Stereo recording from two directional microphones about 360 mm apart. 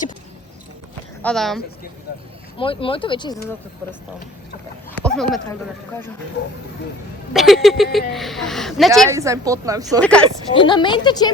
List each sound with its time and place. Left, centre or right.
1.2 s a woman's voice: centre
2.6 s speech: centre
4.9 s speech: centre
7.3 s a woman's voice: centre
10.0 s a woman's voice: centre